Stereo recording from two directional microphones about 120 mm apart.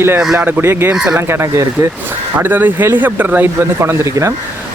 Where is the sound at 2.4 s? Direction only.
15° right (ahead or behind).